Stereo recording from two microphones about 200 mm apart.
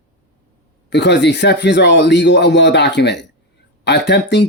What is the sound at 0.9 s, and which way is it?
Speech, 60° left (ahead or behind).